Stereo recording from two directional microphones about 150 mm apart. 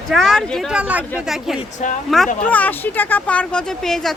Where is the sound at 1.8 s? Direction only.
55° left (ahead or behind).